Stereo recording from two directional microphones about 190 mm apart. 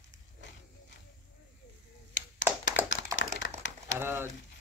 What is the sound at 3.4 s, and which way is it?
Crumpling, 90° left.